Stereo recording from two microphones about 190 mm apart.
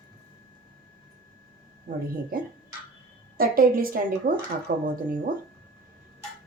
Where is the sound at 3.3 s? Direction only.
50° right (ahead or behind).